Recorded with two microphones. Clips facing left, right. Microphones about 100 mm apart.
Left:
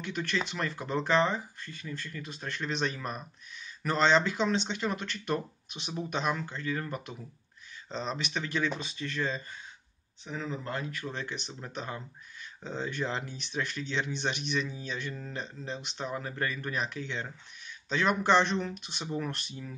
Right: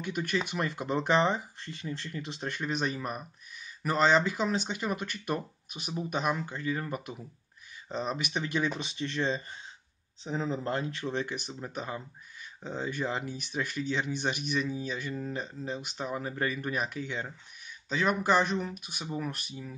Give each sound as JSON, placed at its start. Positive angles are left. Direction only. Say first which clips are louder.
{"t": 0.0, "sound": "speech", "louder": "right 1 dB", "side_deg": -10}